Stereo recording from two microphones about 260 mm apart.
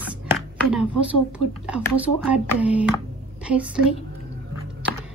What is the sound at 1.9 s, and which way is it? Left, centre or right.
A woman's voice, centre.